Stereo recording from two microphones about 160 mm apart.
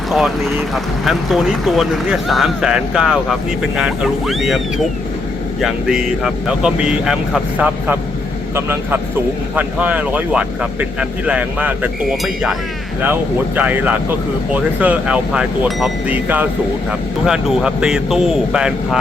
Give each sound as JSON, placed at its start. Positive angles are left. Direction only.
{"t": 0.1, "sound": "speech", "side_deg": 0}
{"t": 8.5, "sound": "speech", "side_deg": -15}
{"t": 13.6, "sound": "speech", "side_deg": -10}